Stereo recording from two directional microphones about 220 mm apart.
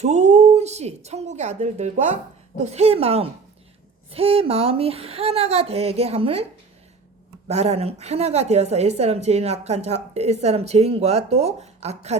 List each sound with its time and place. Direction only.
0.0 s a woman's voice: 30° right (ahead or behind)
7.4 s a woman's voice: 30° right (ahead or behind)